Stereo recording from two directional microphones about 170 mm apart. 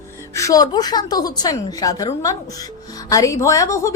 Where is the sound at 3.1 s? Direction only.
20° left (ahead or behind).